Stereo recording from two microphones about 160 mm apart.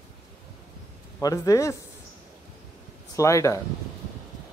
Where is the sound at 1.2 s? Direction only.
20° left (ahead or behind).